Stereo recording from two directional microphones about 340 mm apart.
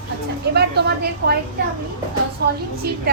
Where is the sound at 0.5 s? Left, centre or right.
Right.